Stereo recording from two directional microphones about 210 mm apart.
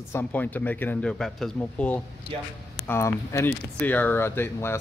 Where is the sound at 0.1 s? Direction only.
10° left (ahead or behind).